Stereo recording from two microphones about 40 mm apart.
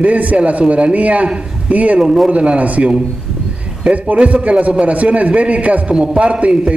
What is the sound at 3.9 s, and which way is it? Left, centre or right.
A man's voice, right.